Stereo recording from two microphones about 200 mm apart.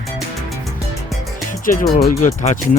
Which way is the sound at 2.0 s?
35° left (ahead or behind).